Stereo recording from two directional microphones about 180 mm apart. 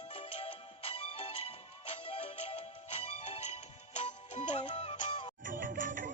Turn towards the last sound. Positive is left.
turn(degrees=-50)  # may be behind; listen again after turning